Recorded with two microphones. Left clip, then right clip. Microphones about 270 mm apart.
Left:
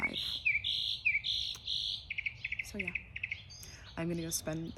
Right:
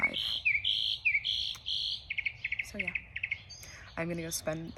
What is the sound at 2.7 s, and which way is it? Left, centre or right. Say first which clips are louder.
Speech: right 3 dB; centre.